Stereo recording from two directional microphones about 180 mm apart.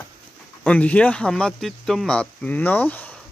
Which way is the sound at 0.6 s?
10° left (ahead or behind).